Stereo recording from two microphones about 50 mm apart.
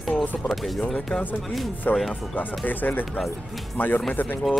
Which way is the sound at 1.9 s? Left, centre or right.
Left.